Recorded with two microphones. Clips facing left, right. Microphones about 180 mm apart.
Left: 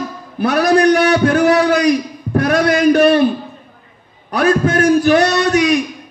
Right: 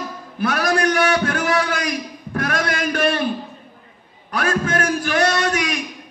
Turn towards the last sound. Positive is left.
turn(degrees=35)  # may be behind; listen again after turning